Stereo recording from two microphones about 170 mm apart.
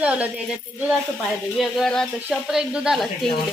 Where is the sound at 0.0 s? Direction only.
10° right (ahead or behind).